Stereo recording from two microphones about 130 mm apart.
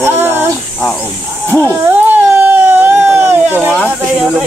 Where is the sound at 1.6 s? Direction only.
15° right (ahead or behind).